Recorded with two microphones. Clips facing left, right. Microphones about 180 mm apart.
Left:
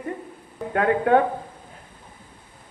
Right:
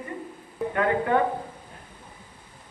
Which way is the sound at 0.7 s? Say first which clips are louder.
Left 5 dB; 60° left (ahead or behind).